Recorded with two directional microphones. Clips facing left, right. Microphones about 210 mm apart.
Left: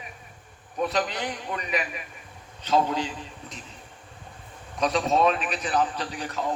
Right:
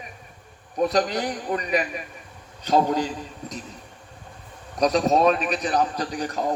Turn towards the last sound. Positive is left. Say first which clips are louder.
# right 4 dB
turn(degrees=-40)  # may be behind; listen again after turning